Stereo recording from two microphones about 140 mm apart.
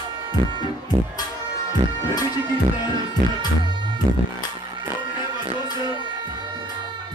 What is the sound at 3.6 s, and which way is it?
Music, 35° right (ahead or behind).